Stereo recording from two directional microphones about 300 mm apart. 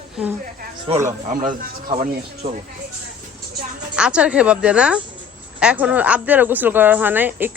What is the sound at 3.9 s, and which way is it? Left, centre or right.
Speech, centre.